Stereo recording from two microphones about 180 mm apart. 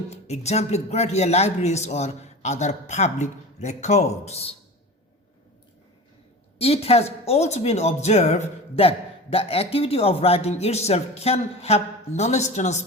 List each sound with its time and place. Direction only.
0.1 s speech: 35° left (ahead or behind)
6.6 s speech: 35° left (ahead or behind)